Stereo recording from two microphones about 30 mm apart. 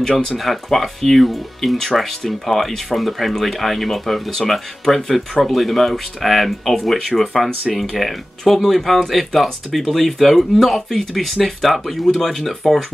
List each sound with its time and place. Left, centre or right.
0.0 s speech: centre
0.4 s speech: centre